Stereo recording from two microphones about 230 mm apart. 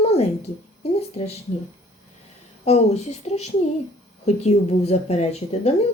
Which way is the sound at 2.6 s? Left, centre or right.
Left.